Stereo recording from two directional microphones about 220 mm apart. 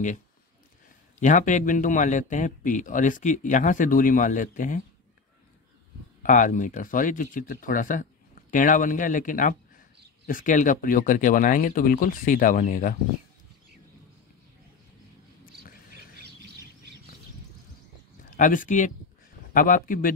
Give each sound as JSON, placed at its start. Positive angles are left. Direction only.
{"t": 1.2, "sound": "a man's voice", "side_deg": 35}
{"t": 6.2, "sound": "a man's voice", "side_deg": 35}
{"t": 18.3, "sound": "a man's voice", "side_deg": 35}